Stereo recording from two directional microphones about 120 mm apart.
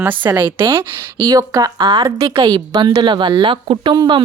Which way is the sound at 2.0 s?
35° right (ahead or behind).